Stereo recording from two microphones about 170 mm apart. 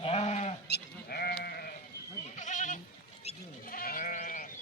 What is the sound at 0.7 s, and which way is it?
Sheep, 65° left (ahead or behind).